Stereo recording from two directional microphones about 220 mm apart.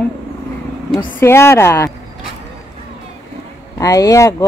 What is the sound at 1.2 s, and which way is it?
Speech, 10° left (ahead or behind).